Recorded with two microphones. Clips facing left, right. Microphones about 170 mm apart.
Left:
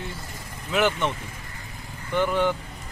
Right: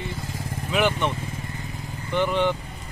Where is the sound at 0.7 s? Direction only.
15° right (ahead or behind).